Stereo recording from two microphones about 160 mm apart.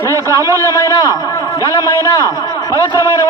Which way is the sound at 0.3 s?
20° left (ahead or behind).